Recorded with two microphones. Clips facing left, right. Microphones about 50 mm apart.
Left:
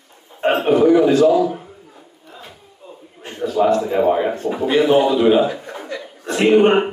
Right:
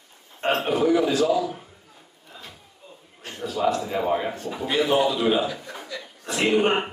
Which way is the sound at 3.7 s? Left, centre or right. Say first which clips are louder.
Left 5 dB; left.